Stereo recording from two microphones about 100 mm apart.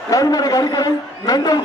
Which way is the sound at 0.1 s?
35° left (ahead or behind).